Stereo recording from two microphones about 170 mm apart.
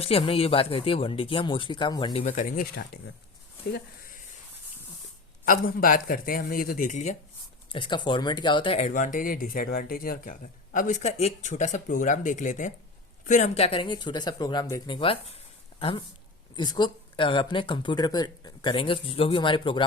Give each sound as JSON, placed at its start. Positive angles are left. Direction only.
{"t": 0.0, "sound": "speech", "side_deg": 35}
{"t": 2.2, "sound": "speech", "side_deg": 50}
{"t": 3.7, "sound": "a sound", "side_deg": 65}
{"t": 5.5, "sound": "speech", "side_deg": 55}
{"t": 7.7, "sound": "speech", "side_deg": 30}
{"t": 8.9, "sound": "speech", "side_deg": 50}